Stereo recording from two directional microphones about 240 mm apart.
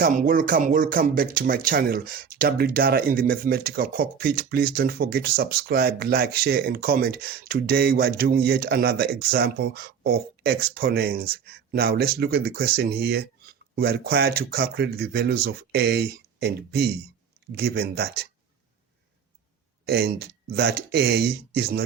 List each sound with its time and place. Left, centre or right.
0.0 s speech: right
19.9 s speech: right